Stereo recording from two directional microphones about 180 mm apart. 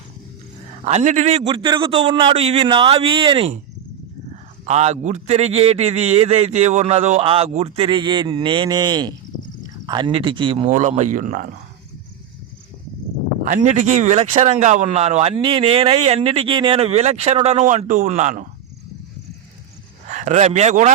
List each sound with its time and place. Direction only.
0.9 s speech: 40° right (ahead or behind)
1.5 s a man's voice: 25° right (ahead or behind)
4.6 s a man's voice: 35° right (ahead or behind)
10.7 s speech: 45° right (ahead or behind)
13.4 s speech: 45° right (ahead or behind)
20.1 s speech: 45° right (ahead or behind)